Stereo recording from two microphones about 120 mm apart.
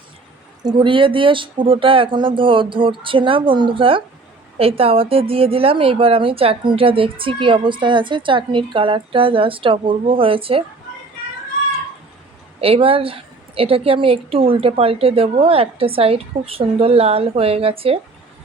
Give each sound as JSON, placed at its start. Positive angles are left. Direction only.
{"t": 0.6, "sound": "a woman's voice", "side_deg": -40}
{"t": 12.5, "sound": "a woman's voice", "side_deg": -55}